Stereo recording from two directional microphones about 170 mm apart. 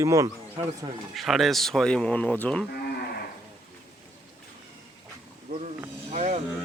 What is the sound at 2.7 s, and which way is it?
Moo, 70° left (ahead or behind).